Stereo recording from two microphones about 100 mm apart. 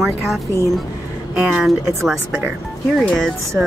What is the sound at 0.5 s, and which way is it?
Speech, 30° left (ahead or behind).